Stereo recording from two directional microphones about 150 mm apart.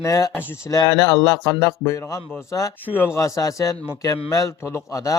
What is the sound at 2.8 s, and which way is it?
A man's voice, 15° left (ahead or behind).